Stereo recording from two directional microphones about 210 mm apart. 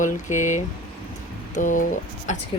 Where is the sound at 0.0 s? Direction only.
35° left (ahead or behind).